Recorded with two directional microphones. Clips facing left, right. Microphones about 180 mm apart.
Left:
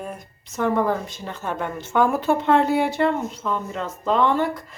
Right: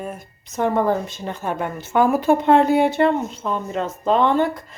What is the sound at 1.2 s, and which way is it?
A woman's voice, 15° right (ahead or behind).